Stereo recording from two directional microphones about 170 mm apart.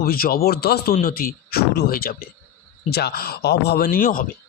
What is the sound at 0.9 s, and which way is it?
Speech, 55° left (ahead or behind).